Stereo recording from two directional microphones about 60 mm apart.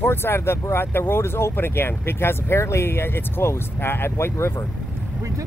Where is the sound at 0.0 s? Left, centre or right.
Left.